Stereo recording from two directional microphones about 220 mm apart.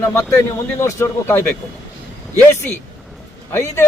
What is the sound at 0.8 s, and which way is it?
Speech, 10° left (ahead or behind).